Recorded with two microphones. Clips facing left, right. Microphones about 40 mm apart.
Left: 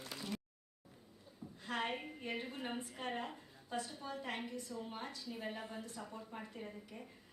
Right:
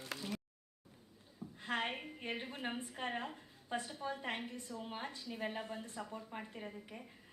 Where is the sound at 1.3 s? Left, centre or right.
Right.